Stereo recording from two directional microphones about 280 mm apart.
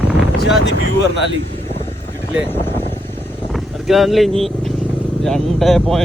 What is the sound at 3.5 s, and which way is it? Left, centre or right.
Vehicle, centre.